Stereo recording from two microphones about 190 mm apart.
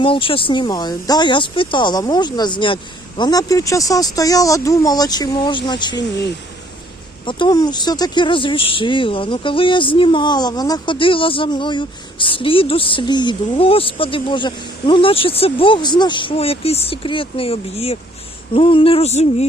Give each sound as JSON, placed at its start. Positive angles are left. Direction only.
{"t": 0.0, "sound": "speech", "side_deg": 25}
{"t": 7.3, "sound": "speech", "side_deg": 25}